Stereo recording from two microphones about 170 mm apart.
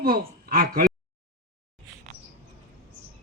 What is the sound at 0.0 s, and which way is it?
Speech, 60° right (ahead or behind).